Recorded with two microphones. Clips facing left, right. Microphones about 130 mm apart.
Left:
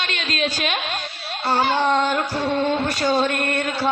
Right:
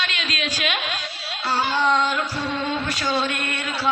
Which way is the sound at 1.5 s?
50° left (ahead or behind).